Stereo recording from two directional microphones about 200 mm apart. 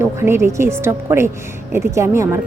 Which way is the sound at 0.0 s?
10° right (ahead or behind).